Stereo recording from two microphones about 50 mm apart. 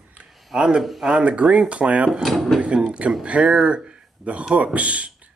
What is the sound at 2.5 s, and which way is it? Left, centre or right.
Speech, centre.